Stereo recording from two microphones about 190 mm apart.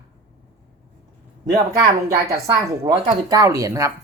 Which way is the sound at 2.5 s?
20° right (ahead or behind).